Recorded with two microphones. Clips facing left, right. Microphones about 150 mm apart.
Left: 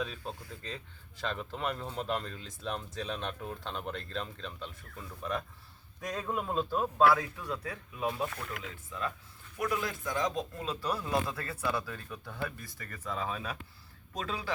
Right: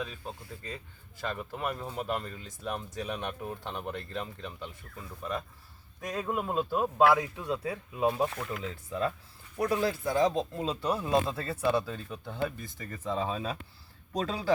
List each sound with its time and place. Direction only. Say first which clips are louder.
0.0 s speech: left 1 dB; 5° right (ahead or behind)
6.0 s speech: right 2 dB; 5° right (ahead or behind); by 14.5 s 35° right (ahead or behind)